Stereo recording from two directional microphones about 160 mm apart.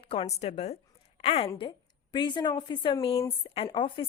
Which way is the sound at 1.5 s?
30° left (ahead or behind).